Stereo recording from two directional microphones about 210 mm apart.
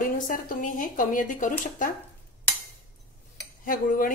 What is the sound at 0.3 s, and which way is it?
A woman's voice, 40° left (ahead or behind).